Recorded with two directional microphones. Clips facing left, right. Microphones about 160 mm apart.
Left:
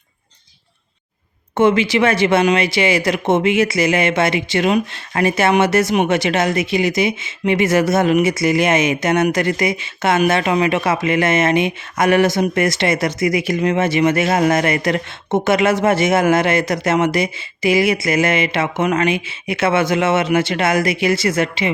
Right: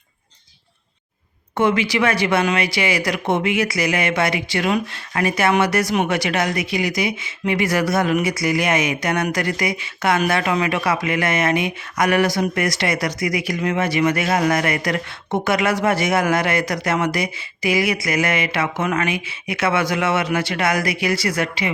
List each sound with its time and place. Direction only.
1.5 s speech: 25° left (ahead or behind)